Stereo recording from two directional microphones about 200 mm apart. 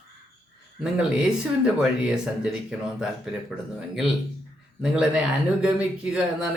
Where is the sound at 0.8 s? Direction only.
5° right (ahead or behind).